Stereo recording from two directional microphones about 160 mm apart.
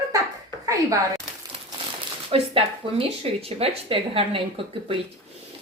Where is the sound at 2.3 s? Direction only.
35° right (ahead or behind).